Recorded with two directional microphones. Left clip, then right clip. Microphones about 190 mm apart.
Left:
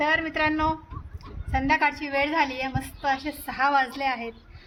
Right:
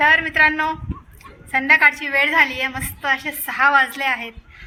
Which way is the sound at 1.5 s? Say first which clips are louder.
Right 9 dB; centre (ahead or behind).